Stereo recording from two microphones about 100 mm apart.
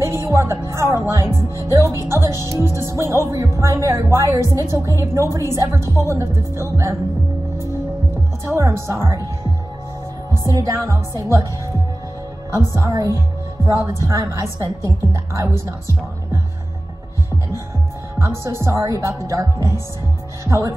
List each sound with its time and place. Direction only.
0.0 s speech: 25° right (ahead or behind)
8.5 s speech: 25° right (ahead or behind)
10.5 s music: 30° right (ahead or behind)
12.5 s speech: 30° right (ahead or behind)
12.9 s music: 35° right (ahead or behind)
13.7 s speech: 30° right (ahead or behind)
18.2 s speech: 25° right (ahead or behind)
19.2 s music: 30° right (ahead or behind)
20.4 s speech: 30° right (ahead or behind)